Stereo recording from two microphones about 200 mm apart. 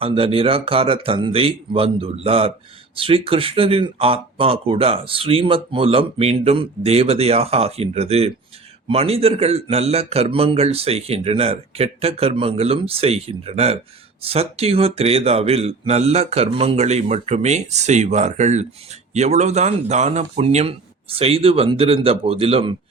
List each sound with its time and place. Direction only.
0.0 s a man's voice: 30° right (ahead or behind)